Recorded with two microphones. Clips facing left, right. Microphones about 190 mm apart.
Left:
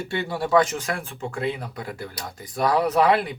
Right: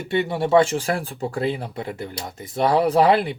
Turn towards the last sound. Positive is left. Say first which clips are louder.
# right 3 dB
turn(degrees=-30)  # may be behind; listen again after turning